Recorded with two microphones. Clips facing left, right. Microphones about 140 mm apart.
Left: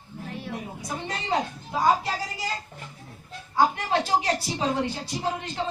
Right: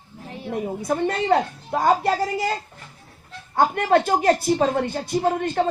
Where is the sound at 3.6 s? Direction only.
55° right (ahead or behind).